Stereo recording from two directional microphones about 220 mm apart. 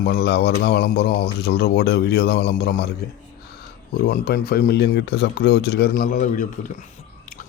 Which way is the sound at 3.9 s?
45° left (ahead or behind).